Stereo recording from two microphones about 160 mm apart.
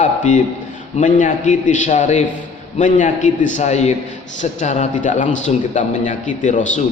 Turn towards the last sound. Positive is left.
turn(degrees=50)  # may be behind; listen again after turning